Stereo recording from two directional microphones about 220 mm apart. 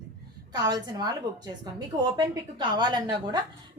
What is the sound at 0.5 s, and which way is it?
Speech, 20° right (ahead or behind).